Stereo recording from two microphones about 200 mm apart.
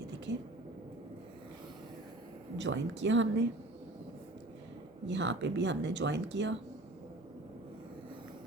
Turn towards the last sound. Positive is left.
turn(degrees=-60)  # may be behind; listen again after turning